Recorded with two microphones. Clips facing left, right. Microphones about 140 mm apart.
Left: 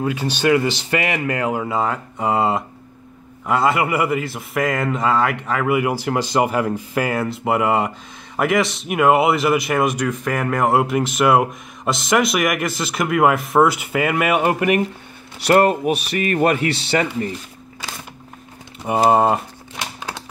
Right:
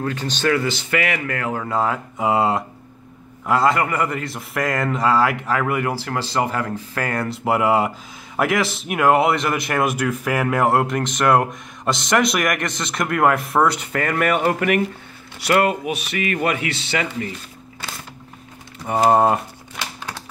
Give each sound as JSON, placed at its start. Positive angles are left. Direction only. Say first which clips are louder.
{"t": 0.0, "sound": "speech", "louder": "left 3 dB", "side_deg": 10}
{"t": 1.8, "sound": "speech", "louder": "even", "side_deg": 0}
{"t": 15.5, "sound": "speech", "louder": "left 4 dB", "side_deg": 40}
{"t": 19.0, "sound": "speech", "louder": "even", "side_deg": 5}